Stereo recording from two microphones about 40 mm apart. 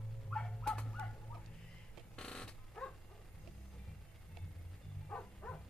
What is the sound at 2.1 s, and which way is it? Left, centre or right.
Dog, left.